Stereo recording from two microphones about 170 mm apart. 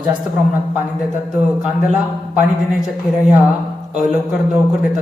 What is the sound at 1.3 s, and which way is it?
Speech, 5° right (ahead or behind).